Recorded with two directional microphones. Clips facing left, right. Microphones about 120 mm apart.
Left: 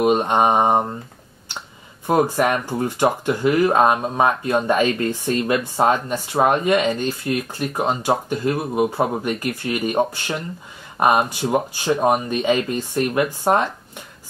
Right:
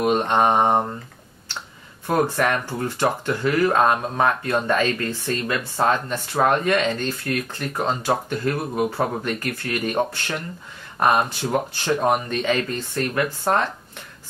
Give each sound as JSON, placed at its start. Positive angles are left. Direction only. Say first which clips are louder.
{"t": 0.0, "sound": "speech", "louder": "left 2 dB", "side_deg": 10}
{"t": 2.0, "sound": "speech", "louder": "left 3 dB", "side_deg": 10}